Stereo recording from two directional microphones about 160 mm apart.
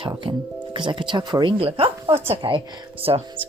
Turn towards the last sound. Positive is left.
turn(degrees=-35)  # may be behind; listen again after turning